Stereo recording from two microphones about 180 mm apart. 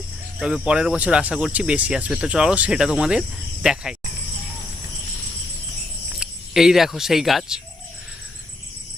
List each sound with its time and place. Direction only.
0.3 s speech: 5° right (ahead or behind)
6.1 s speech: 5° right (ahead or behind)